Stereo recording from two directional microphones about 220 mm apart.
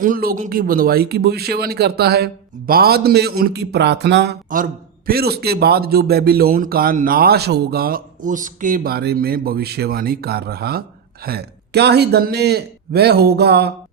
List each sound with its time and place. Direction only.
0.0 s speech: 40° right (ahead or behind)